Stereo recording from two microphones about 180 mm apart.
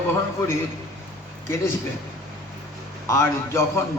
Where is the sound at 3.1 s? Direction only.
15° left (ahead or behind).